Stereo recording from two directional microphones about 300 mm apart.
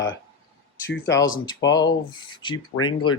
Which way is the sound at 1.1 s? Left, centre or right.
Centre.